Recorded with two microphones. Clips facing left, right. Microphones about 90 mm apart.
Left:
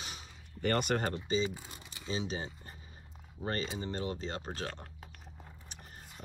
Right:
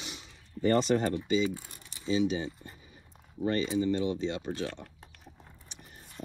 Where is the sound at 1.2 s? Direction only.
35° left (ahead or behind).